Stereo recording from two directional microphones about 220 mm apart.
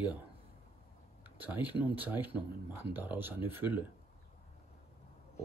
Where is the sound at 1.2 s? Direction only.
10° right (ahead or behind).